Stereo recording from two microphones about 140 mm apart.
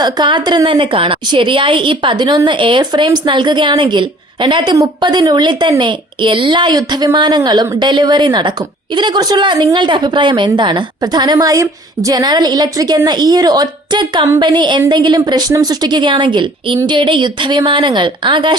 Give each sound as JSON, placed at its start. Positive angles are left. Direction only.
{"t": 0.0, "sound": "a woman's voice", "side_deg": -35}